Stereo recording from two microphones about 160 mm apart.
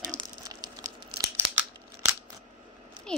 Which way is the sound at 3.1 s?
5° left (ahead or behind).